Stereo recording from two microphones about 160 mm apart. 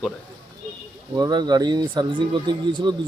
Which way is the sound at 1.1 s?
25° right (ahead or behind).